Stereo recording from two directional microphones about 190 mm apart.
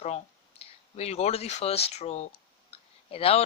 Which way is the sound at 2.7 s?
30° left (ahead or behind).